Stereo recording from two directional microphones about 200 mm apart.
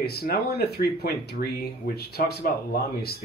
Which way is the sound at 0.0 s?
50° left (ahead or behind).